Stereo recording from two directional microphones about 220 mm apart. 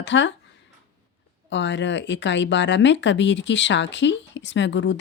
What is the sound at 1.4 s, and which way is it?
Speech, 55° left (ahead or behind).